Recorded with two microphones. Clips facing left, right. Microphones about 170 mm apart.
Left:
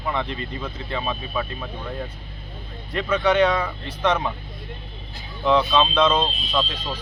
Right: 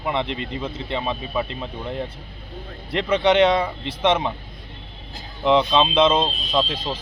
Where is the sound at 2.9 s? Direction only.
25° right (ahead or behind).